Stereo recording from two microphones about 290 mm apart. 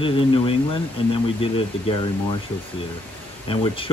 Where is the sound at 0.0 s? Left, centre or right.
Centre.